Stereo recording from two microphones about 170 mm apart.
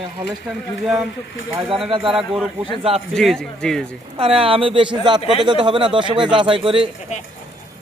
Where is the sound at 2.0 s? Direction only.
Centre (ahead or behind).